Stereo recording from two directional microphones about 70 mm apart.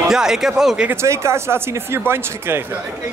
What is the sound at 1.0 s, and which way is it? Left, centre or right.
Speech, right.